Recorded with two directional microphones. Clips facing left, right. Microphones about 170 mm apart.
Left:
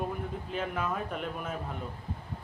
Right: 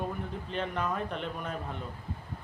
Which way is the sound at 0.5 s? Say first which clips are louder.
Right 1 dB; 5° left (ahead or behind).